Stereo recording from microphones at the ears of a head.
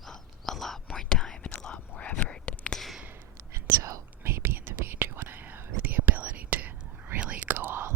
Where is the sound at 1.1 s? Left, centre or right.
Left.